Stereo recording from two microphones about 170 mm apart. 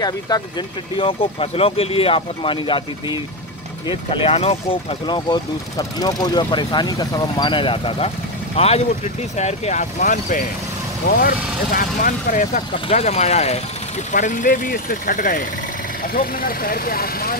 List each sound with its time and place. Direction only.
0.0 s speech: 25° left (ahead or behind)
3.8 s speech: 35° left (ahead or behind); by 10.4 s 50° left (ahead or behind)
11.1 s speech: 60° left (ahead or behind)
12.8 s speech: 40° left (ahead or behind)
14.1 s speech: 50° left (ahead or behind)